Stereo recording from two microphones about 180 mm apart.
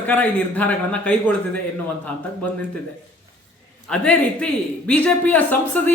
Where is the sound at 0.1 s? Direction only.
10° left (ahead or behind).